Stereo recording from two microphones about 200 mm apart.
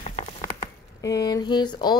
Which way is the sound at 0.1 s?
35° left (ahead or behind).